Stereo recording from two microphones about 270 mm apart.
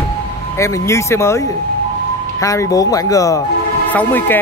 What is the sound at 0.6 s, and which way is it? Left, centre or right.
Speech, centre.